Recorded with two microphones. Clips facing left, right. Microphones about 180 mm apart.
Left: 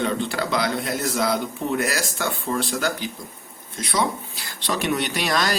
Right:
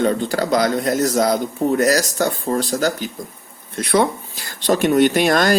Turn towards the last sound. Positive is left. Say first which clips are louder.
# right 8 dB
turn(degrees=-50)  # may be behind; listen again after turning